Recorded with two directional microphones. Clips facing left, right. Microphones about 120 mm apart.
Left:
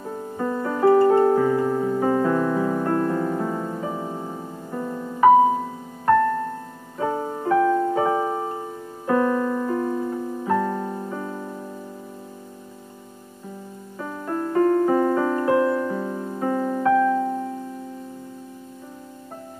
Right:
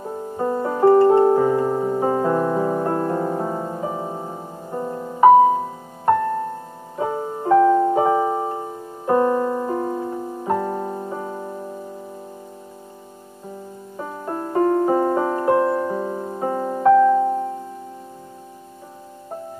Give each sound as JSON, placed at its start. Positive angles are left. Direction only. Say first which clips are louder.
{"t": 0.4, "sound": "music", "louder": "right 3 dB", "side_deg": -25}
{"t": 7.0, "sound": "music", "louder": "right 1 dB", "side_deg": -25}
{"t": 13.9, "sound": "music", "louder": "even", "side_deg": -25}